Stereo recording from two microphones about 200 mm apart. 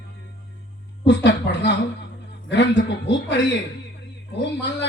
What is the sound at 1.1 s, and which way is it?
A man's voice, 60° left (ahead or behind).